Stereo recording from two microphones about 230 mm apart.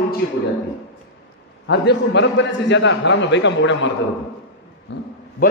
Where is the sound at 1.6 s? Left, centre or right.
Left.